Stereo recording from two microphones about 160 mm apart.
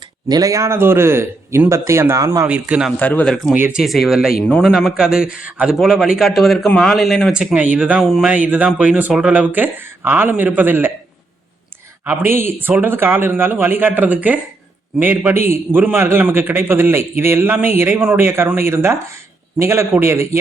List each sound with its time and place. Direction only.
0.3 s a man's voice: 25° right (ahead or behind)
2.5 s a man's voice: 10° right (ahead or behind)
3.0 s a man's voice: 10° left (ahead or behind); by 10.9 s 10° right (ahead or behind)
12.0 s a man's voice: 15° right (ahead or behind)